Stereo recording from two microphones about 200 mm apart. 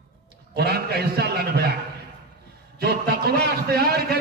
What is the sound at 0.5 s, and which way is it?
A man's voice, 50° right (ahead or behind).